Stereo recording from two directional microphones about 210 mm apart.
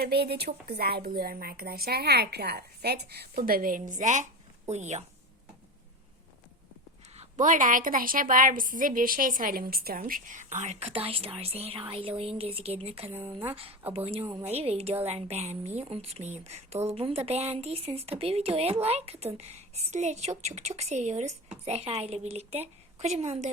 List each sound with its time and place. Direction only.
0.0 s a woman's voice: 50° right (ahead or behind); by 5.0 s 35° right (ahead or behind)
7.2 s a woman's voice: 35° right (ahead or behind)
13.1 s speech: 10° right (ahead or behind)
13.9 s a woman's voice: 25° right (ahead or behind)